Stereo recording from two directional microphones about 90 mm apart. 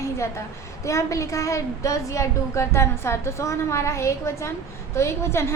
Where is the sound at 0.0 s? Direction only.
35° left (ahead or behind).